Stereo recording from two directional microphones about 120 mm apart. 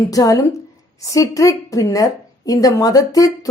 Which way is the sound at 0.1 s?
30° left (ahead or behind).